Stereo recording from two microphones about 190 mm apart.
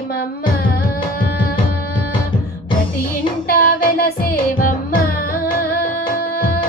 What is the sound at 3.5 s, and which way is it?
Music, 50° left (ahead or behind).